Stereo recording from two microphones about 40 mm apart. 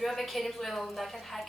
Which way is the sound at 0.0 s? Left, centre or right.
Centre.